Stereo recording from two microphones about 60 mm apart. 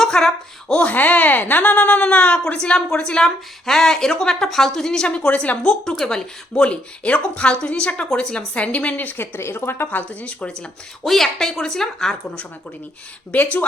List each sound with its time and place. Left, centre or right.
0.0 s a woman's voice: centre
0.8 s a woman's voice: left
5.8 s speech: centre
11.0 s a woman's voice: centre
13.3 s speech: left